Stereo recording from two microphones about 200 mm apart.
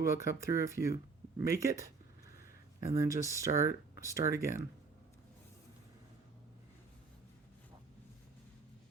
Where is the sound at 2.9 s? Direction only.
15° right (ahead or behind).